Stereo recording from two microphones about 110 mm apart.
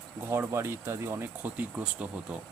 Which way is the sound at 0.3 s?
25° right (ahead or behind).